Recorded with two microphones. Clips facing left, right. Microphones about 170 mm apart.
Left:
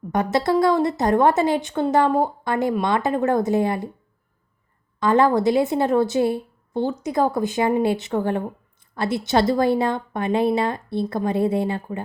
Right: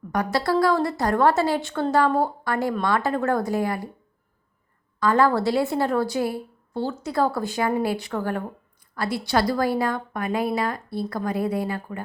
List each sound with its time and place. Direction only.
0.1 s a woman's voice: 20° left (ahead or behind)
4.9 s a woman's voice: 20° left (ahead or behind)